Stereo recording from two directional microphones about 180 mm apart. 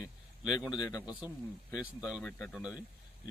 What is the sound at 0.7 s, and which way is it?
Speech, 20° left (ahead or behind).